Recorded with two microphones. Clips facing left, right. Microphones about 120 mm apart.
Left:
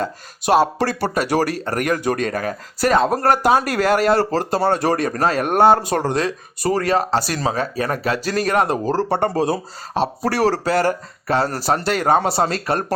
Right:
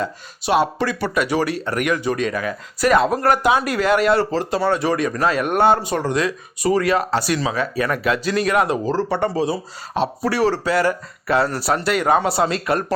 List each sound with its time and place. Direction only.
0.0 s speech: 40° left (ahead or behind)
9.3 s speech: 45° left (ahead or behind)